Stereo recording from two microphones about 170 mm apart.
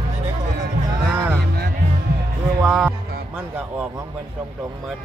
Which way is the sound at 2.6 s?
Centre (ahead or behind).